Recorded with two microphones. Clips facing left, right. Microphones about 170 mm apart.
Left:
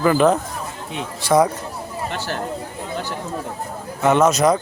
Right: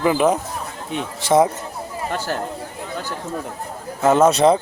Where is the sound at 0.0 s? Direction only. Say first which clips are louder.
Left 1 dB; 10° right (ahead or behind).